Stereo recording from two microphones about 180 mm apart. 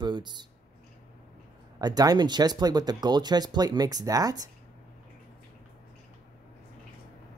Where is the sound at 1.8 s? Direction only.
20° right (ahead or behind).